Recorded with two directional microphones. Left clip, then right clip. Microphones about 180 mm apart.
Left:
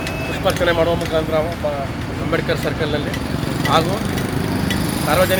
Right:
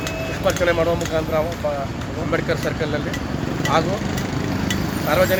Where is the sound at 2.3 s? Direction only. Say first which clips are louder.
Left 2 dB; centre (ahead or behind).